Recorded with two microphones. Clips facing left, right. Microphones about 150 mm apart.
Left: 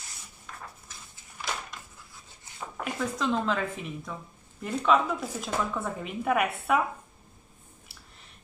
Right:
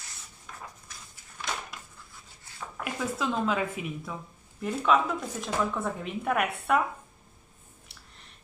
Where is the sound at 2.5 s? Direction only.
20° left (ahead or behind).